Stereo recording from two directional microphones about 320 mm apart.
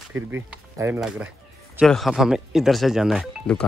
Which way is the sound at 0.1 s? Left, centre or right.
Centre.